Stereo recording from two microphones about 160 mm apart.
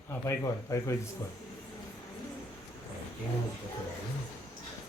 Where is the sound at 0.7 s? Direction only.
20° left (ahead or behind).